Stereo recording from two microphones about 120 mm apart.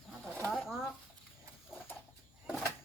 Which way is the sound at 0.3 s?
15° left (ahead or behind).